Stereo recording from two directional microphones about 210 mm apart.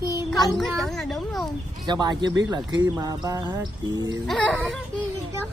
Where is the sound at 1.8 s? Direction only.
20° right (ahead or behind).